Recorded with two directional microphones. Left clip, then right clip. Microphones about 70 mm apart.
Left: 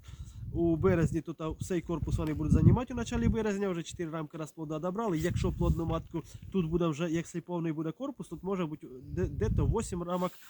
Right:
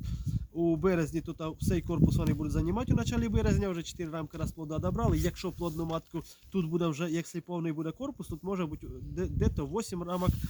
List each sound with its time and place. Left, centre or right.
0.3 s speech: right